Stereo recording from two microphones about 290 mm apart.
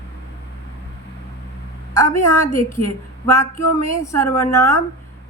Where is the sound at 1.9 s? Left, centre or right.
Centre.